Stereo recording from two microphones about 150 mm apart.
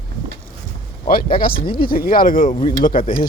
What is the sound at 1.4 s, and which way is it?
Speech, 75° left (ahead or behind).